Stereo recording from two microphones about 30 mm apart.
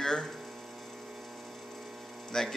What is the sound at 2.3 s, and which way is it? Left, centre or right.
Speech, left.